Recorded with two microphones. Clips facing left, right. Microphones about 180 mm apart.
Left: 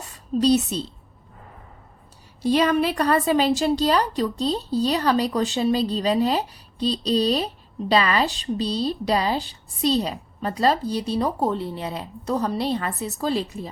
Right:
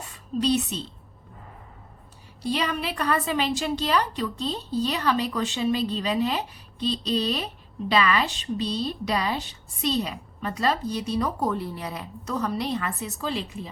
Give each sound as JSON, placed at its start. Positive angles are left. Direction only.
{"t": 0.0, "sound": "a woman's voice", "side_deg": 40}
{"t": 2.4, "sound": "a woman's voice", "side_deg": 45}